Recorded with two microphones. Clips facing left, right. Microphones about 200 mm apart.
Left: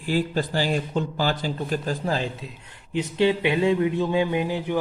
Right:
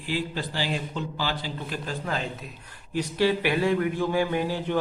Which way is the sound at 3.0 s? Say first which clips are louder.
Left 2 dB; 20° left (ahead or behind).